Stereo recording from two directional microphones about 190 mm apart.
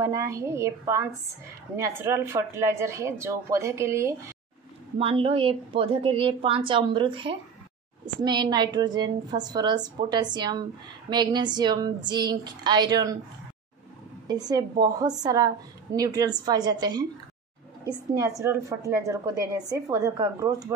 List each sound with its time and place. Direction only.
0.0 s speech: 15° right (ahead or behind)
4.9 s a woman's voice: 30° right (ahead or behind)
14.2 s a woman's voice: 20° right (ahead or behind)
18.2 s speech: 15° right (ahead or behind)